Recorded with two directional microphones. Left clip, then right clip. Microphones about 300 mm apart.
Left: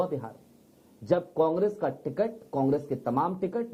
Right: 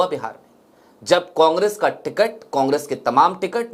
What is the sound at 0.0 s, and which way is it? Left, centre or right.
Speech, centre.